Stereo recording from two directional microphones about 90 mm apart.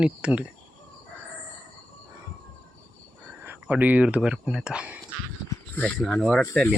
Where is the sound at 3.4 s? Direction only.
20° right (ahead or behind).